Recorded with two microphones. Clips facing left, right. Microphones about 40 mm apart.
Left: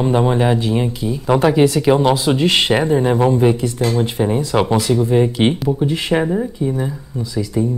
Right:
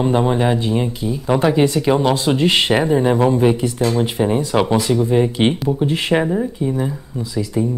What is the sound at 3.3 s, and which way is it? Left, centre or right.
Speech, centre.